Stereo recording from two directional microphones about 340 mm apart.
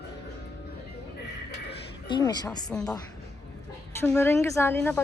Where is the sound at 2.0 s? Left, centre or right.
Centre.